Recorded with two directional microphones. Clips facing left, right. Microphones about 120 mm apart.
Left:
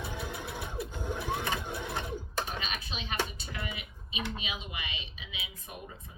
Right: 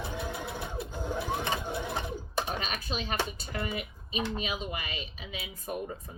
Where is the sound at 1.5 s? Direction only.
20° right (ahead or behind).